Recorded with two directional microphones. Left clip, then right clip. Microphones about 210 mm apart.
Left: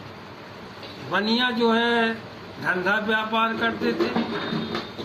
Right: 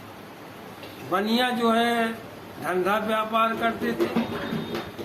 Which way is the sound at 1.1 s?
20° right (ahead or behind).